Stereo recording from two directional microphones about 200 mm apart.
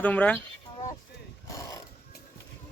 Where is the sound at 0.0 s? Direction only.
5° left (ahead or behind).